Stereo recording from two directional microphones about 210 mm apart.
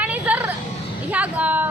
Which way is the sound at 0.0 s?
5° right (ahead or behind).